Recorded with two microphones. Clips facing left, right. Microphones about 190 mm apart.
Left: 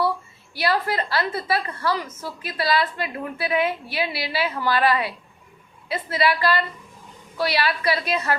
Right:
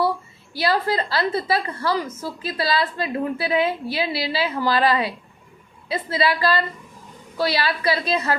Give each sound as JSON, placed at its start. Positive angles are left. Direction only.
{"t": 0.5, "sound": "a woman's voice", "side_deg": -30}